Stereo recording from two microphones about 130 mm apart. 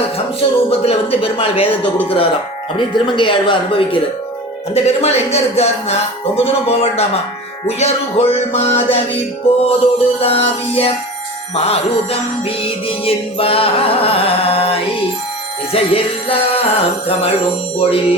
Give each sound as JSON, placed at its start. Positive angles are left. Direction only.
{"t": 0.3, "sound": "speech", "side_deg": 50}
{"t": 4.7, "sound": "music", "side_deg": 55}